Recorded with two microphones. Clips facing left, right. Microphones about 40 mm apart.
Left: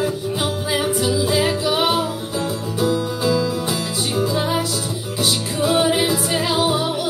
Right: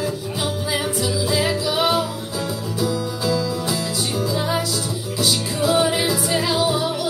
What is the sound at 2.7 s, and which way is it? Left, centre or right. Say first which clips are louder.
Music: left 4 dB; left.